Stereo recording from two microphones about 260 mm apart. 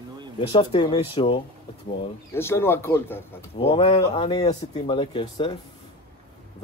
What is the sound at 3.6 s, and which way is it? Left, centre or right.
Speech, centre.